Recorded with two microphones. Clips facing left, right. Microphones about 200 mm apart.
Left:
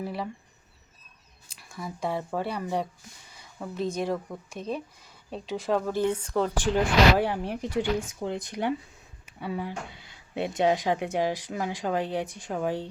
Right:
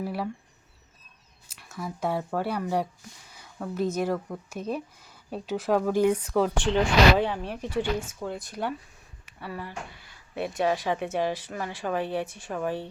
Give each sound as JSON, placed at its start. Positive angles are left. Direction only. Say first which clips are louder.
{"t": 0.0, "sound": "speech", "louder": "right 2 dB", "side_deg": -5}
{"t": 1.5, "sound": "speech", "louder": "right 2 dB", "side_deg": -5}
{"t": 6.7, "sound": "speech", "louder": "even", "side_deg": 10}